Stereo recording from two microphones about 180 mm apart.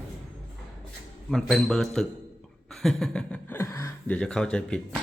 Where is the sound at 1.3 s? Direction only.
Centre (ahead or behind).